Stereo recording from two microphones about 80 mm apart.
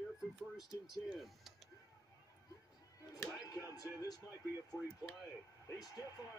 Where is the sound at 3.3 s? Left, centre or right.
Left.